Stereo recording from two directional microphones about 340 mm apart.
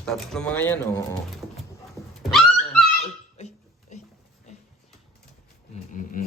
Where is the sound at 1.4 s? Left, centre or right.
Centre.